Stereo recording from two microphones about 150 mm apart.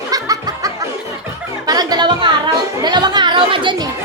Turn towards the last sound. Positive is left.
turn(degrees=-35)  # may be behind; listen again after turning